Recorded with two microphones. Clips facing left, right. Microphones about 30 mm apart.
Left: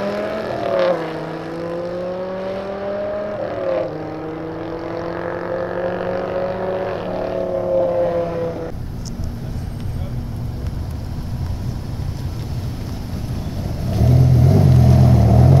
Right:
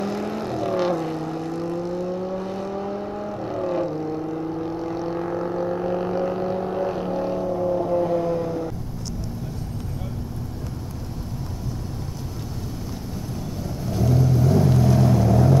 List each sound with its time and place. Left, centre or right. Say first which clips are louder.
0.0 s vehicle: left 5 dB; left
13.8 s vehicle: left 4 dB; left